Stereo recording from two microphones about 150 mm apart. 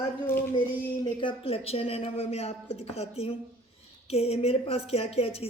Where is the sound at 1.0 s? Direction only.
35° left (ahead or behind).